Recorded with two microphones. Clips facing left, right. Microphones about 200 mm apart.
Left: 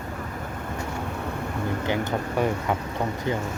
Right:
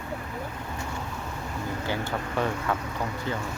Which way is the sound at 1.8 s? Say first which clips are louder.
Left 3 dB; 20° left (ahead or behind).